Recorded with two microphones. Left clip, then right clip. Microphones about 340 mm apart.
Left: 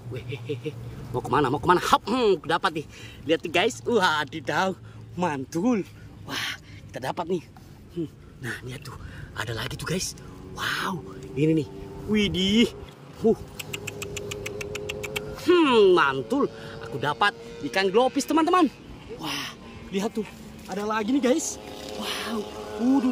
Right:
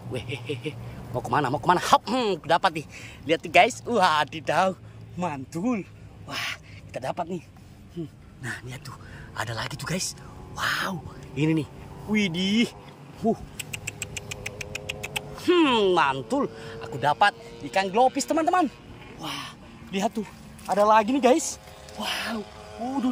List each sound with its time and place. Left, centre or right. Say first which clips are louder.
0.1 s speech: right 2 dB; centre
13.2 s a sound: left 4 dB; centre
19.1 s crow: left 3 dB; centre
20.6 s speech: right 9 dB; centre